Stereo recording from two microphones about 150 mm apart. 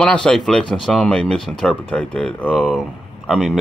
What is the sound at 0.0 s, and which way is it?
Speech, 5° left (ahead or behind).